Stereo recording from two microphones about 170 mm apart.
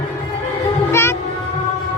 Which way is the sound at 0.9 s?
15° left (ahead or behind).